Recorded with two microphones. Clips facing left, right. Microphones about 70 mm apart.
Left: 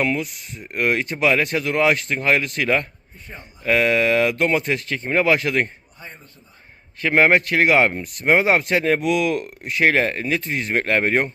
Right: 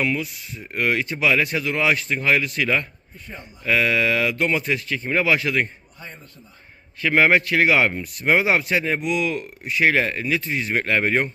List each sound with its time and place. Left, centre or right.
0.0 s speech: left
3.2 s speech: left
3.7 s speech: left
7.0 s speech: left
8.7 s speech: left
9.0 s speech: left